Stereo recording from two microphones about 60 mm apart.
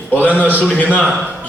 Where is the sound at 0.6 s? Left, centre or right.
Left.